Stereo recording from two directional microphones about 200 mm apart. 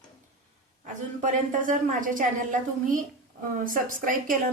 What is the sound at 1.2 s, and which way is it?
A woman's voice, 40° right (ahead or behind).